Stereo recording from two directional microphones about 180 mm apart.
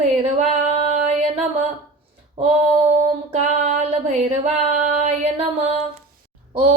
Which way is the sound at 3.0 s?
40° right (ahead or behind).